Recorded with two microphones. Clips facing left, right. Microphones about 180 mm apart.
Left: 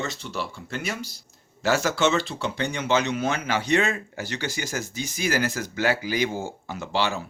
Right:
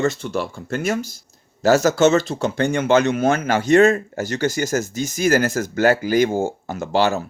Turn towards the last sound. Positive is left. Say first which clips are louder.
# right 7 dB
turn(degrees=-45)  # may be behind; listen again after turning